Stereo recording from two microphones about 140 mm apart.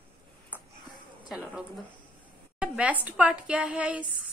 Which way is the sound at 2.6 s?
10° right (ahead or behind).